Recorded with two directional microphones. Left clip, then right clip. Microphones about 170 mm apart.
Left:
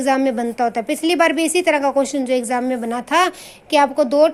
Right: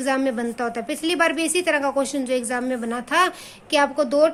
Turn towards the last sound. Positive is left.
turn(degrees=20)  # may be behind; listen again after turning